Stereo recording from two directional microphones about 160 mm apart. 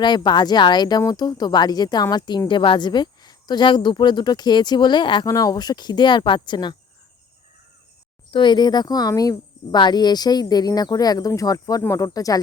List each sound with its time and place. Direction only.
0.0 s speech: 30° left (ahead or behind)
8.3 s speech: 30° left (ahead or behind)